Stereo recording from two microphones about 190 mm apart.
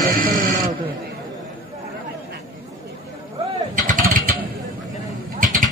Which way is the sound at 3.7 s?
45° right (ahead or behind).